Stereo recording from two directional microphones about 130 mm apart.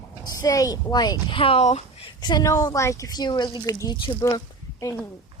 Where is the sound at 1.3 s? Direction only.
45° left (ahead or behind).